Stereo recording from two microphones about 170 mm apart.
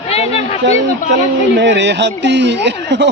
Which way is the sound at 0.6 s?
90° right.